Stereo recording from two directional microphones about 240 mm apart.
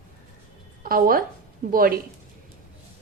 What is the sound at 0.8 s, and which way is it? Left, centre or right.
A woman's voice, right.